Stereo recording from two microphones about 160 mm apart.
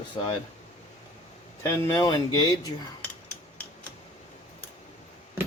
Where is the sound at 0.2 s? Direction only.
35° left (ahead or behind).